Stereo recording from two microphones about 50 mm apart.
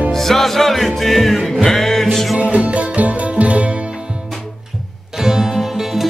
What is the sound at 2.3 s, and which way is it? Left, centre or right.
Music, right.